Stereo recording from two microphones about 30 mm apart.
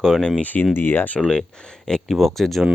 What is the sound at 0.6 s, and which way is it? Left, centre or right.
Speech, left.